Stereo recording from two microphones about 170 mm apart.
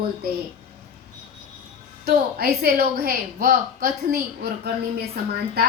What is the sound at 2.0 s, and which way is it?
A woman's voice, 65° right (ahead or behind).